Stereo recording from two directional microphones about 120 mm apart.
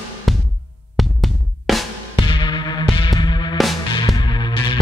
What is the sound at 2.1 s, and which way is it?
Music, 40° left (ahead or behind).